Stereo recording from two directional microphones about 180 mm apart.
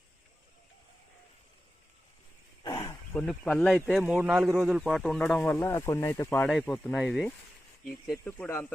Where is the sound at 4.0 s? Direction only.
10° right (ahead or behind); by 6.5 s 15° left (ahead or behind).